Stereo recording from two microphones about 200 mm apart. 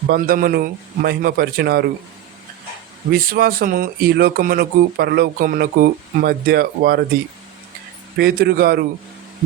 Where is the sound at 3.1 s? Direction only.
50° right (ahead or behind).